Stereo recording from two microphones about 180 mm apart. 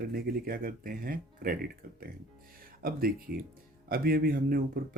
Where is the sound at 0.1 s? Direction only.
55° right (ahead or behind).